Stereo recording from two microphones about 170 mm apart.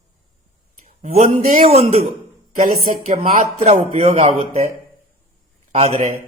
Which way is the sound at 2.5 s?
55° right (ahead or behind).